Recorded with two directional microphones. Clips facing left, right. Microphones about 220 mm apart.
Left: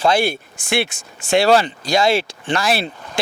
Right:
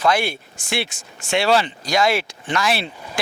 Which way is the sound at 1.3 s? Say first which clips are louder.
Left 4 dB; 40° left (ahead or behind).